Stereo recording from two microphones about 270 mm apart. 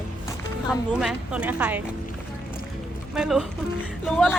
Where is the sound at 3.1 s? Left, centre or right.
Centre.